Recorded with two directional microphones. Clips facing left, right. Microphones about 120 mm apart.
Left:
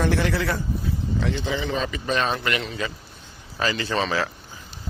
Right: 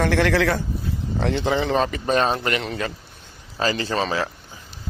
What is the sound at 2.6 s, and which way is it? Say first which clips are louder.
Speech: right 2 dB; 55° right (ahead or behind).